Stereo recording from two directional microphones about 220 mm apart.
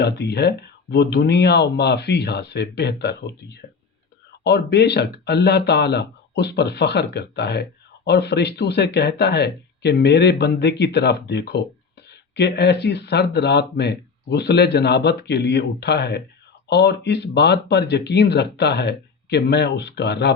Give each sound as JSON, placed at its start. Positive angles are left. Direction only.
{"t": 0.0, "sound": "speech", "side_deg": 50}